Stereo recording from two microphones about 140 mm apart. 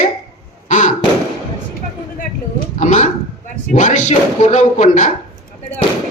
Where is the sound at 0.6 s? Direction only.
65° left (ahead or behind).